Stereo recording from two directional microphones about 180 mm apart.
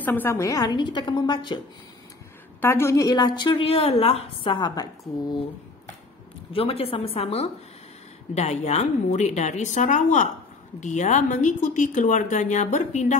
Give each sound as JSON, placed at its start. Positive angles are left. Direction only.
{"t": 0.0, "sound": "a woman's voice", "side_deg": 10}
{"t": 2.6, "sound": "a woman's voice", "side_deg": 15}
{"t": 6.5, "sound": "a woman's voice", "side_deg": 30}